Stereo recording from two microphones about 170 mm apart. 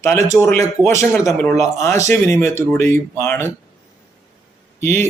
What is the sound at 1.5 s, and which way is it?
Speech, 15° left (ahead or behind).